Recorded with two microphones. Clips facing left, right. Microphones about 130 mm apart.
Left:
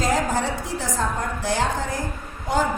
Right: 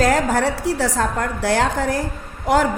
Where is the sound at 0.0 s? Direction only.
70° right (ahead or behind).